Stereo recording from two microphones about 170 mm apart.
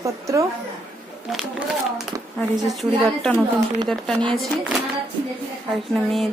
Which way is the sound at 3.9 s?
5° left (ahead or behind).